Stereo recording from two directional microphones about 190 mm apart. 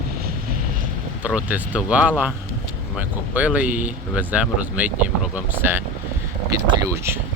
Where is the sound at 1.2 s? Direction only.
10° right (ahead or behind).